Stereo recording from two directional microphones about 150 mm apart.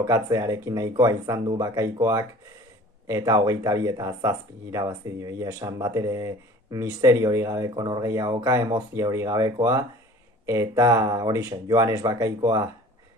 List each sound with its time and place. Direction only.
0.0 s speech: 20° right (ahead or behind)